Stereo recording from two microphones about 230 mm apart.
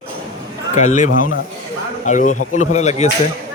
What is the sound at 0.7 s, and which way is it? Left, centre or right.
Speech, left.